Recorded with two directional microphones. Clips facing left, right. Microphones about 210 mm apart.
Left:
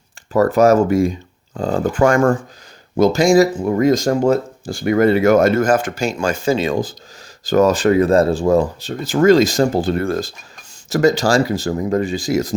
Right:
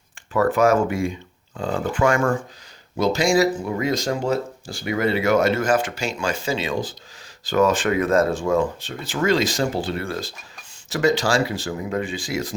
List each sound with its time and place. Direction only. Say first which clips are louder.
0.3 s speech: left 5 dB; 40° left (ahead or behind)